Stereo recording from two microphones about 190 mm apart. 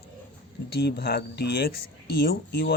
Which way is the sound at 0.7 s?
55° left (ahead or behind).